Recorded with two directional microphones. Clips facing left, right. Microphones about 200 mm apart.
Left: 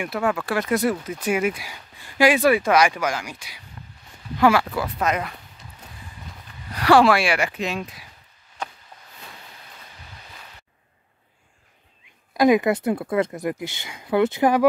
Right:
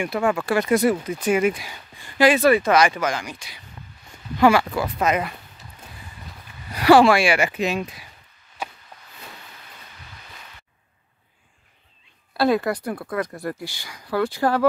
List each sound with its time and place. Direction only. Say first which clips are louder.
0.0 s speech: right 2 dB; centre (ahead or behind)
6.7 s speech: right 2 dB; 5° right (ahead or behind)
8.6 s a sound: even; 5° right (ahead or behind)
12.4 s speech: left 3 dB; 15° left (ahead or behind)